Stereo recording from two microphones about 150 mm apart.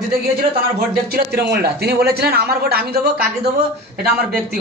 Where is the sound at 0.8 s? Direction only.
90° right.